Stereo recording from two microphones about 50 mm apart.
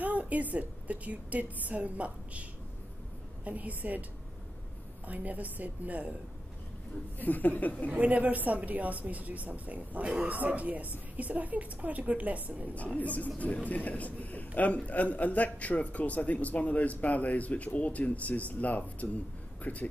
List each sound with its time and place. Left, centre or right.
0.0 s a woman's voice: right
3.4 s a woman's voice: right
5.0 s a woman's voice: right
7.2 s a man's voice: left
7.9 s a woman's voice: right
12.7 s a man's voice: left